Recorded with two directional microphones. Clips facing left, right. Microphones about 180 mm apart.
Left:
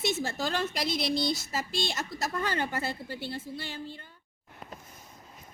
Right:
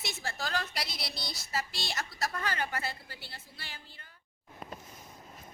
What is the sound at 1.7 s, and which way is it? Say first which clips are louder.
Speech: left 8 dB; 25° left (ahead or behind).